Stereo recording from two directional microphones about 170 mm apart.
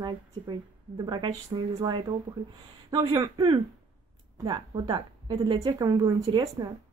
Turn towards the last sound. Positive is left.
turn(degrees=-25)  # may be behind; listen again after turning